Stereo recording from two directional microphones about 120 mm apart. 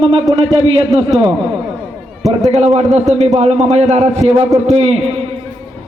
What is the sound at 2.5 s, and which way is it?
A man's voice, 60° right (ahead or behind).